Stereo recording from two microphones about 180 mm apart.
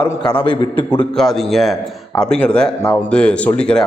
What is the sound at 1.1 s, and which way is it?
A man's voice, centre (ahead or behind).